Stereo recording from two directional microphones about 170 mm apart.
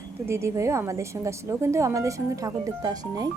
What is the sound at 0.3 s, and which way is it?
Speech, 15° right (ahead or behind).